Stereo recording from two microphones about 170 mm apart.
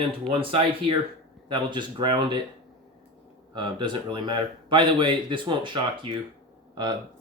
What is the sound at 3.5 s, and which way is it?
A man's voice, 30° right (ahead or behind).